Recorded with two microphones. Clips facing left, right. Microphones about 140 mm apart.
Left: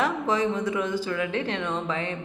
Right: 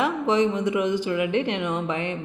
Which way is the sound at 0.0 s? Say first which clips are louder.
Right 3 dB; 15° right (ahead or behind).